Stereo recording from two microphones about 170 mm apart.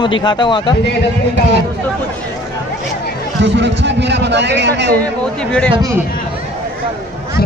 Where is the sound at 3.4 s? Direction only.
90° right.